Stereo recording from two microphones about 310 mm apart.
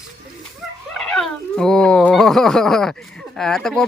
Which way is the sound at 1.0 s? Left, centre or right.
Centre.